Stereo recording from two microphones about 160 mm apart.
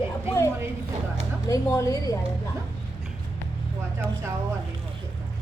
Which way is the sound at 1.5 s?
20° left (ahead or behind).